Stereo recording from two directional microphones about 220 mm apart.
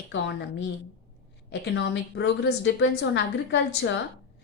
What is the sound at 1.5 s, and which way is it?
A woman's voice, 55° left (ahead or behind).